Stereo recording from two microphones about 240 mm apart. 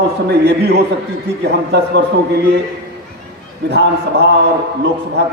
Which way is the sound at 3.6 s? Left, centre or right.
Right.